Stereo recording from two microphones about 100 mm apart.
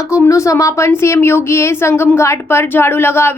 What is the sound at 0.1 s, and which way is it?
A woman's voice, 30° left (ahead or behind).